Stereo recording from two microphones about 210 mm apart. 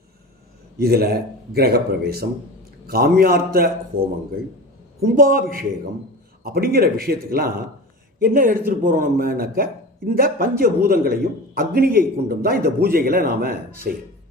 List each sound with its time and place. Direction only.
0.8 s speech: 45° right (ahead or behind)